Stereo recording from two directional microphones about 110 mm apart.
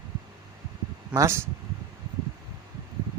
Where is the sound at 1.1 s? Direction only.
25° right (ahead or behind).